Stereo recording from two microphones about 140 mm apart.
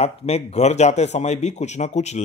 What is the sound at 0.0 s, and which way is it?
A man's voice, 50° left (ahead or behind).